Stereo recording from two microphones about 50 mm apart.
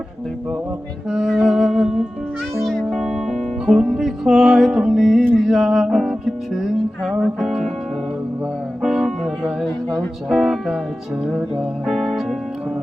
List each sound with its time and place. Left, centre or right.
1.1 s music: centre
2.6 s music: centre
7.3 s speech: centre
8.8 s music: centre
9.4 s speech: centre
11.2 s music: right
11.9 s speech: centre